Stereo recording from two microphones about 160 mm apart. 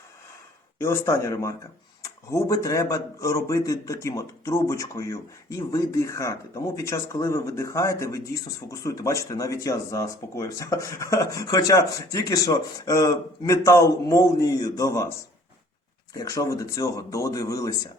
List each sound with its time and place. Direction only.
0.8 s a man's voice: 15° left (ahead or behind)
16.1 s a man's voice: 20° left (ahead or behind)